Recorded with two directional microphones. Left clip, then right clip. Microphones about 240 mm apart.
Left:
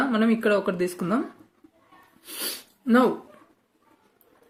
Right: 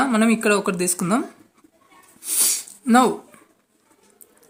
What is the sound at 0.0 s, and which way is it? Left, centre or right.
Speech, right.